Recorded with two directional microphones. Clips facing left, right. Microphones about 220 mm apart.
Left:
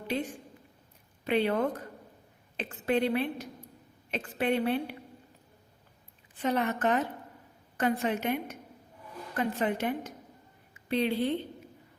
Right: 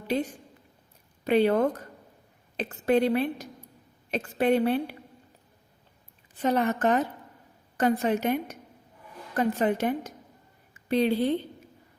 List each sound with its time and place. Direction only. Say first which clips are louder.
1.2 s a woman's voice: right 5 dB; 40° right (ahead or behind)
6.4 s a woman's voice: right 4 dB; 40° right (ahead or behind)